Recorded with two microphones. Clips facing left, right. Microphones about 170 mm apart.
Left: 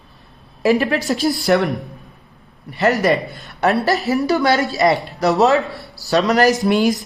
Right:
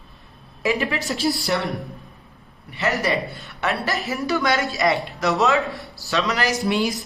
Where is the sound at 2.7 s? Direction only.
45° left (ahead or behind).